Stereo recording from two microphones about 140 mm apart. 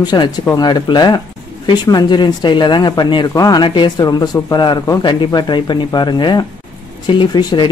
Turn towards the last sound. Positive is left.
turn(degrees=35)  # may be behind; listen again after turning